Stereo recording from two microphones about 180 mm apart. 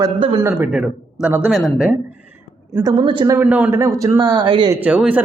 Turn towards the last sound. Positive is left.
turn(degrees=-5)  # may be behind; listen again after turning